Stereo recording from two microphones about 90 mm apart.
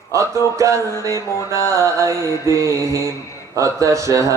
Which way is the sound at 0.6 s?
35° right (ahead or behind).